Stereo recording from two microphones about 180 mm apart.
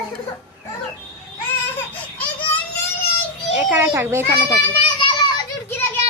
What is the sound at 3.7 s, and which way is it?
Speech, 10° right (ahead or behind).